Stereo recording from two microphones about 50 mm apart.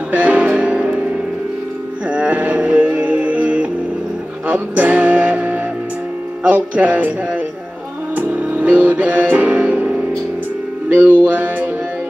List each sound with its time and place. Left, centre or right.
0.1 s music: right
2.0 s a sound: right
4.5 s music: right
6.5 s speech: right
8.2 s music: right
10.9 s music: right